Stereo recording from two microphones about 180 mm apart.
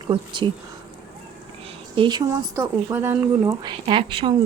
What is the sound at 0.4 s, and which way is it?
Speech, 25° right (ahead or behind).